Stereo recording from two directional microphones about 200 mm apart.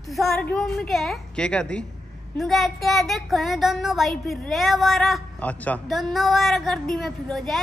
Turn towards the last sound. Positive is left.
turn(degrees=0)  # may be behind; listen again after turning